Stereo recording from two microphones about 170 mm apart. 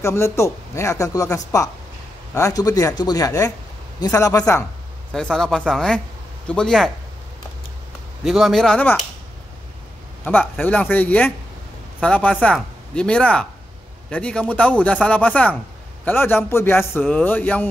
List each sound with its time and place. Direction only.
0.0 s a man's voice: 15° left (ahead or behind)
5.1 s speech: 5° left (ahead or behind)
8.2 s speech: centre (ahead or behind)
10.2 s a man's voice: 10° left (ahead or behind)